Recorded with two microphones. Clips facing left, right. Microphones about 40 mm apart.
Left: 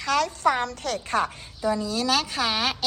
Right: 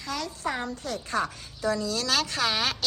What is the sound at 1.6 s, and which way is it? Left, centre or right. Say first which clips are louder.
A woman's voice: left 3 dB; centre.